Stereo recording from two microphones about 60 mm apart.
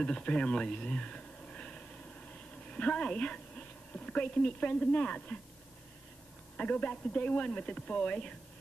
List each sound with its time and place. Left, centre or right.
0.0 s a woman's voice: centre
6.5 s speech: left